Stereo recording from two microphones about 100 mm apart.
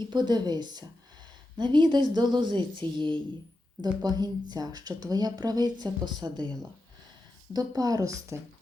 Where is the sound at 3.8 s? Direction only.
40° right (ahead or behind).